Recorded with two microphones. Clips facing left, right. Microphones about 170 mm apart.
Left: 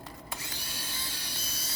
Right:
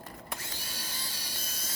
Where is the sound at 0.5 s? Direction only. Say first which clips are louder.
Left 1 dB; 40° right (ahead or behind).